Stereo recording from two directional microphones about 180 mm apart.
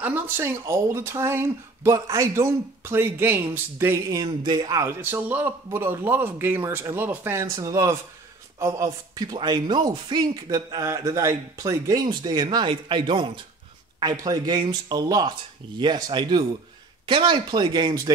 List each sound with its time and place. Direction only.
0.0 s speech: 15° right (ahead or behind)